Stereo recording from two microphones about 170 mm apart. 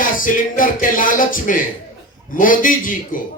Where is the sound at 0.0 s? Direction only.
55° left (ahead or behind).